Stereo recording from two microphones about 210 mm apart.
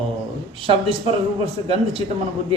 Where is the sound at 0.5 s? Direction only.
25° right (ahead or behind).